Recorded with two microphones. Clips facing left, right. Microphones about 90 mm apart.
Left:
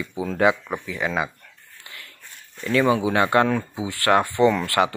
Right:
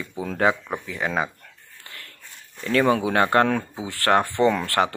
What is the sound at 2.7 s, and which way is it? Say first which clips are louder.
Speech: even; 50° right (ahead or behind).